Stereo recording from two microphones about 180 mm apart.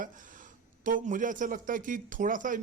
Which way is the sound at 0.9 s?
45° right (ahead or behind).